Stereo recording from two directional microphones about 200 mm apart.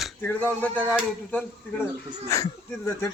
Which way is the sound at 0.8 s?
5° right (ahead or behind).